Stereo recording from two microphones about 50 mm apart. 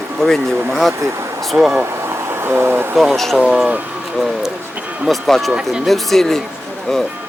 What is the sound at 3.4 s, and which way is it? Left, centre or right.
Speech, centre.